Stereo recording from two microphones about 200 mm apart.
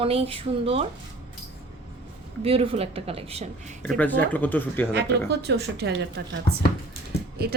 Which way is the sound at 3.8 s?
5° left (ahead or behind).